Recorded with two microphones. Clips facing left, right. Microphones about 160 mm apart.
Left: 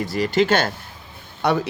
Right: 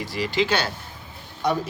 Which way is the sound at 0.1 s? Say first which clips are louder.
Left 4 dB; 45° left (ahead or behind).